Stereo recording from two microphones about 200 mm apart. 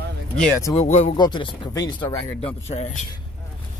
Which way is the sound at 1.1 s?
20° left (ahead or behind).